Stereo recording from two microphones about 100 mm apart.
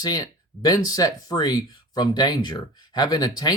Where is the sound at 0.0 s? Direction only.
40° left (ahead or behind).